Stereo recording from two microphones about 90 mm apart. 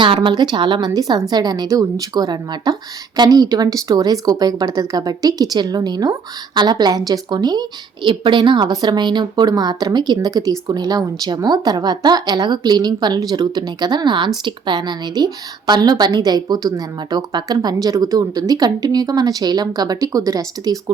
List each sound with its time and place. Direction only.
0.0 s a woman's voice: 65° right (ahead or behind); by 20.9 s 45° right (ahead or behind)